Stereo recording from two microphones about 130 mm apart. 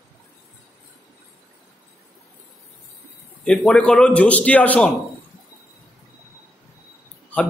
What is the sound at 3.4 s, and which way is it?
A man's voice, 5° left (ahead or behind).